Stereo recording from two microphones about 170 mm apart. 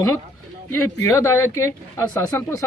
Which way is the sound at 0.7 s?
15° left (ahead or behind).